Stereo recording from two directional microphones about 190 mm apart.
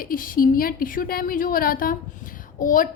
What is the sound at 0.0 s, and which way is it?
A woman's voice, 50° left (ahead or behind).